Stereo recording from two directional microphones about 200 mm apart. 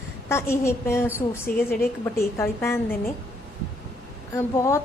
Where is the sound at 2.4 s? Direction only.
15° left (ahead or behind).